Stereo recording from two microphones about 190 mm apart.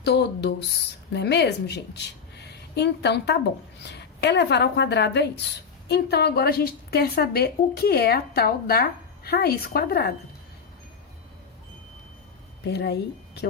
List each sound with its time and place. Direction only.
0.0 s a woman's voice: 60° left (ahead or behind)
12.6 s speech: 60° left (ahead or behind)